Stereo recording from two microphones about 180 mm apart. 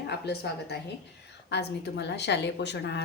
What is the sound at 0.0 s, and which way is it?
A woman's voice, 65° left (ahead or behind).